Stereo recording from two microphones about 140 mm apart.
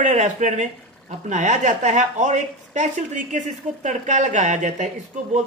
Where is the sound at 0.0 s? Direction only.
60° right (ahead or behind).